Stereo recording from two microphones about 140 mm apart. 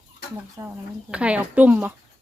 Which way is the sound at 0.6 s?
30° right (ahead or behind).